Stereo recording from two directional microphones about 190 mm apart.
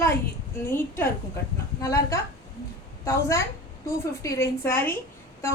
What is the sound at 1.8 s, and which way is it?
A woman's voice, 15° left (ahead or behind).